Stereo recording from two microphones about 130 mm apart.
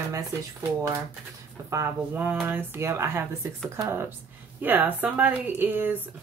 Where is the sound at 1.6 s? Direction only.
15° right (ahead or behind).